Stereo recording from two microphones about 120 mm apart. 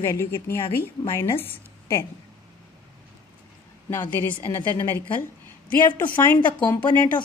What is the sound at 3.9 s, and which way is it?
A woman's voice, 20° left (ahead or behind).